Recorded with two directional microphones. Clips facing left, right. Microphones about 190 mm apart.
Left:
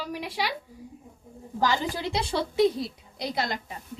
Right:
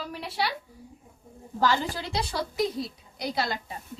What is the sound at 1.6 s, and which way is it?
A woman's voice, 15° left (ahead or behind).